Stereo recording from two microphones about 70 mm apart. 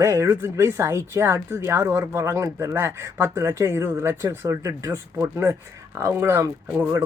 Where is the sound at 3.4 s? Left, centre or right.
Right.